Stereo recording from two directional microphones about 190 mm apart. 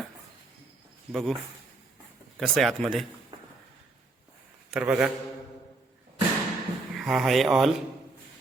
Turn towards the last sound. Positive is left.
turn(degrees=0)  # may be behind; listen again after turning